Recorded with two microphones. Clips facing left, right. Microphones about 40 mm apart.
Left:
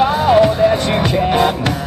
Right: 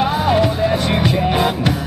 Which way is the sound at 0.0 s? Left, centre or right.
Centre.